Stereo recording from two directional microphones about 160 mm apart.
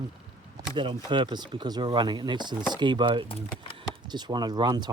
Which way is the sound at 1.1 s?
30° right (ahead or behind).